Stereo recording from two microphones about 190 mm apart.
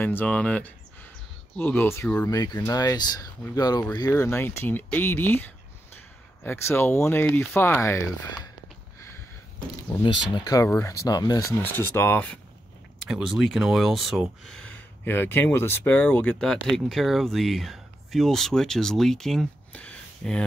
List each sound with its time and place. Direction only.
0.0 s speech: 10° left (ahead or behind)
6.4 s speech: 10° left (ahead or behind)
10.3 s speech: 20° left (ahead or behind)
13.1 s speech: centre (ahead or behind)